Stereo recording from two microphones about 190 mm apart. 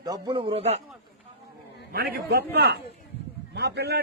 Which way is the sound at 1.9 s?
55° right (ahead or behind).